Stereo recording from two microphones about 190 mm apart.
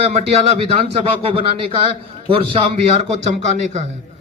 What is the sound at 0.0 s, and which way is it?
Speech, 35° right (ahead or behind).